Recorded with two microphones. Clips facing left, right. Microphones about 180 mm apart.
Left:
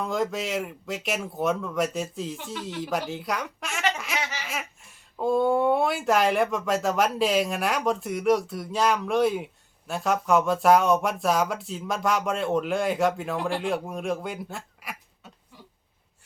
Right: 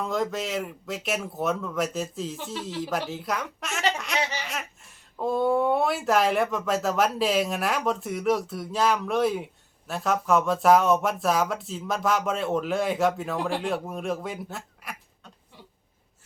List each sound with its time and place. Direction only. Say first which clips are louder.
0.0 s speech: even; centre (ahead or behind)
2.4 s speech: right 1 dB; 20° right (ahead or behind)
2.6 s speech: left 1 dB; centre (ahead or behind)
3.9 s a sound: right 2 dB; centre (ahead or behind)
5.1 s speech: left 1 dB; centre (ahead or behind)